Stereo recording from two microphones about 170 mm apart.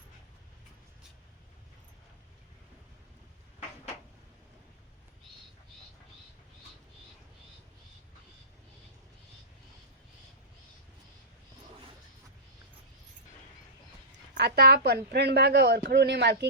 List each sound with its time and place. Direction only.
14.3 s a woman's voice: 75° right (ahead or behind)